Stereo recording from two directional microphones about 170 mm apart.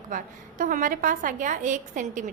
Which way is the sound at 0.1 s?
50° right (ahead or behind).